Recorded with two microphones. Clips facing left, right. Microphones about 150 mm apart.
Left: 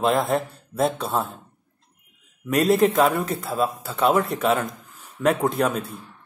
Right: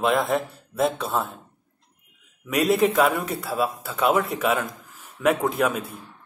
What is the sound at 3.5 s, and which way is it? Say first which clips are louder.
A man's voice: right 1 dB; centre (ahead or behind).